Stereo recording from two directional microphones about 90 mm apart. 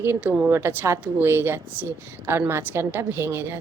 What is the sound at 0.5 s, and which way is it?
A woman's voice, 25° right (ahead or behind).